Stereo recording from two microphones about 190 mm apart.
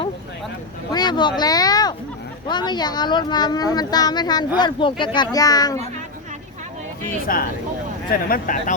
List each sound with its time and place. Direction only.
0.9 s speech: 20° left (ahead or behind)
1.4 s a sound: 20° left (ahead or behind)
2.5 s speech: 25° left (ahead or behind)
7.3 s speech: 50° left (ahead or behind)